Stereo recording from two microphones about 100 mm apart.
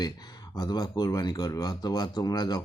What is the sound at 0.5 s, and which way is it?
Speech, 40° left (ahead or behind).